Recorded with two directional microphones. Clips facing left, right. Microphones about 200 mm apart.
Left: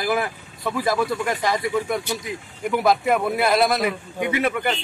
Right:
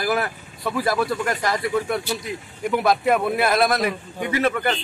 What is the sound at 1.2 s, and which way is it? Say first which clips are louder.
Speech: left 1 dB; 15° left (ahead or behind).